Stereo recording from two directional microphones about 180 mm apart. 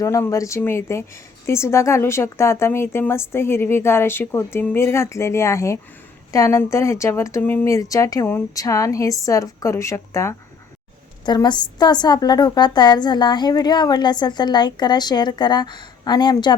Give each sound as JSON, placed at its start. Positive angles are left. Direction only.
{"t": 0.0, "sound": "a woman's voice", "side_deg": 15}